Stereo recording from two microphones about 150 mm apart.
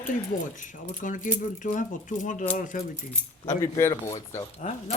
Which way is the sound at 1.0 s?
65° left (ahead or behind).